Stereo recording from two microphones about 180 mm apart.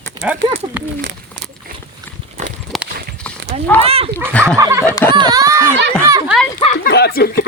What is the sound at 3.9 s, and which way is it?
Speech, 35° right (ahead or behind).